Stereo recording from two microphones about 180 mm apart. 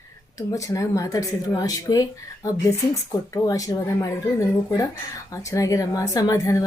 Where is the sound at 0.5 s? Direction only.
20° left (ahead or behind).